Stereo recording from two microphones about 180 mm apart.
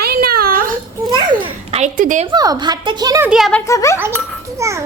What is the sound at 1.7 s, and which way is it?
Speech, 45° right (ahead or behind).